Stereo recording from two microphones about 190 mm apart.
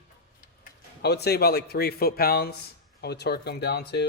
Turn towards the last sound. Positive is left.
turn(degrees=60)  # may be behind; listen again after turning